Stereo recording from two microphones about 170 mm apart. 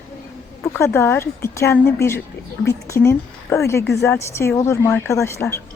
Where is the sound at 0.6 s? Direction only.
15° left (ahead or behind).